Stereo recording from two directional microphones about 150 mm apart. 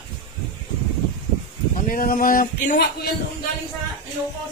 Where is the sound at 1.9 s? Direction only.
75° left (ahead or behind); by 3.1 s 90° left.